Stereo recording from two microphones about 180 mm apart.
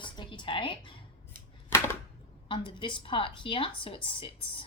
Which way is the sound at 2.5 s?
25° left (ahead or behind).